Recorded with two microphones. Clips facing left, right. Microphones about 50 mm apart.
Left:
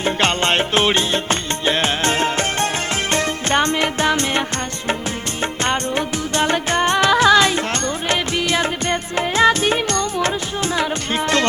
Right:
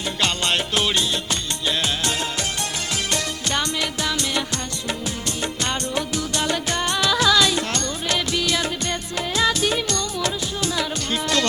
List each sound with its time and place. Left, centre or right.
0.0 s music: left
5.4 s music of bollywood: left